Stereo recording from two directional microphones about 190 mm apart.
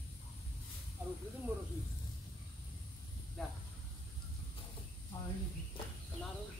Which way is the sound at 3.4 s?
Centre (ahead or behind).